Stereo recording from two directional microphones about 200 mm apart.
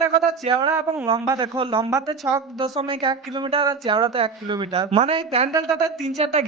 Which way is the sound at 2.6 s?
25° right (ahead or behind).